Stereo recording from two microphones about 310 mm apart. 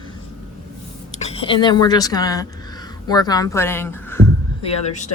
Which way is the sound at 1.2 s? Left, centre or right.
Centre.